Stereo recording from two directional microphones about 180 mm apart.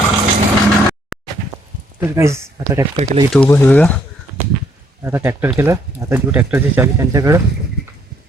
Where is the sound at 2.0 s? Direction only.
15° right (ahead or behind).